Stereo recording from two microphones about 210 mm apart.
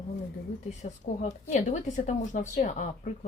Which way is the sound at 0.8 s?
35° left (ahead or behind).